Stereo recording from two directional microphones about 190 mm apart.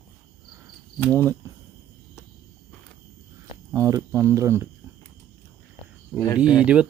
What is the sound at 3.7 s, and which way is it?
Speech, 15° right (ahead or behind).